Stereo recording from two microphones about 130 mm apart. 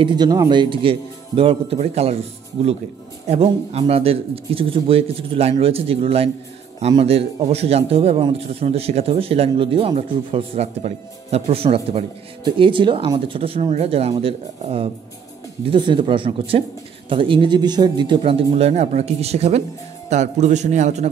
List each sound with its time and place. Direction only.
0.0 s a man's voice: 35° right (ahead or behind); by 2.1 s 55° right (ahead or behind)
3.3 s a man's voice: 50° right (ahead or behind)